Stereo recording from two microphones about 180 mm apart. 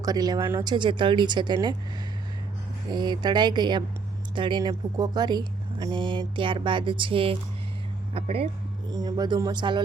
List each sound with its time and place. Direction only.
0.0 s speech: 20° right (ahead or behind)
2.9 s speech: 25° right (ahead or behind)
8.9 s speech: 20° right (ahead or behind)